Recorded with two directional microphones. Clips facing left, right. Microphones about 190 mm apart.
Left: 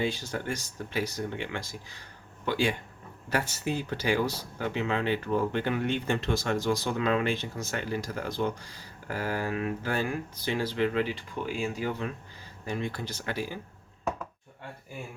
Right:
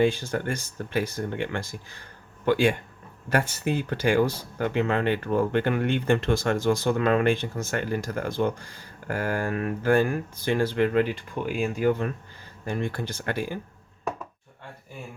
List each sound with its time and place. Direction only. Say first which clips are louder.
0.0 s speech: right 7 dB; 55° right (ahead or behind)